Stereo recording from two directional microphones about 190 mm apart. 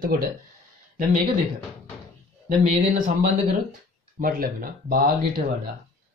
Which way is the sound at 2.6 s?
45° right (ahead or behind).